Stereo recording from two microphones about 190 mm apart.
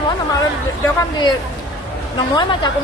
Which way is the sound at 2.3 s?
20° left (ahead or behind).